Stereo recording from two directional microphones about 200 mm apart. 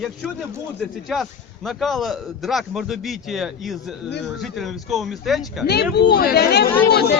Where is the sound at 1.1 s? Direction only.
Centre (ahead or behind).